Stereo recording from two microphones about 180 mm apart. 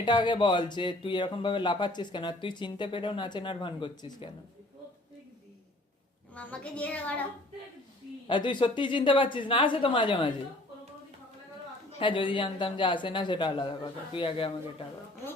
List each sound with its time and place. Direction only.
0.0 s speech: 25° left (ahead or behind)
6.3 s a woman's voice: 5° left (ahead or behind)
8.3 s speech: 25° left (ahead or behind)
11.9 s speech: 30° left (ahead or behind)